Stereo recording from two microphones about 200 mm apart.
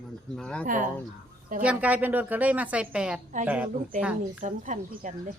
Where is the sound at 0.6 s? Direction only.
40° right (ahead or behind).